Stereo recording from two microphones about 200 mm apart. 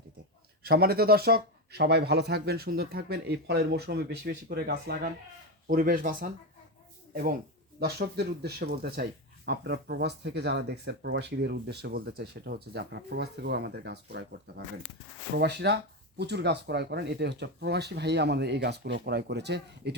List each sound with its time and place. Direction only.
0.6 s speech: 50° right (ahead or behind)
7.8 s speech: 55° right (ahead or behind)